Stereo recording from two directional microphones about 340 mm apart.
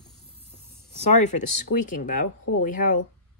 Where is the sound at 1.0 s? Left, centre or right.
Left.